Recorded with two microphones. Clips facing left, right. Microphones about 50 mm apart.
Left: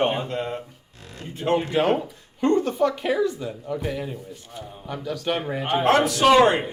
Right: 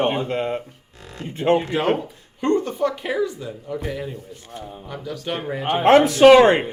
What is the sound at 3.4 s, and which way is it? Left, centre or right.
Speech, centre.